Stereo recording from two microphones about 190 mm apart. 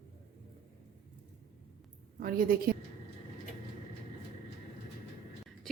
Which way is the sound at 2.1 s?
50° right (ahead or behind).